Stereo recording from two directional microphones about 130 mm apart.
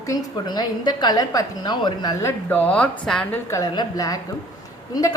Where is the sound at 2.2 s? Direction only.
15° left (ahead or behind).